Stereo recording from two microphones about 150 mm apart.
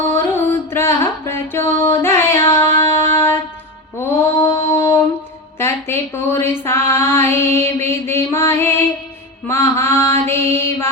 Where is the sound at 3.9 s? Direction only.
15° left (ahead or behind).